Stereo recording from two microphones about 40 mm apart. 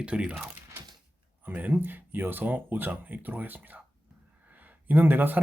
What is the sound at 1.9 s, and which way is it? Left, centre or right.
A man's voice, right.